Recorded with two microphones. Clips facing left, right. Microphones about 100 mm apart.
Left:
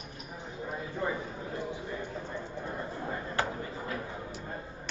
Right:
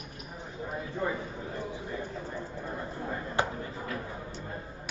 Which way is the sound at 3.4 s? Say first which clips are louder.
Right 2 dB; 20° right (ahead or behind).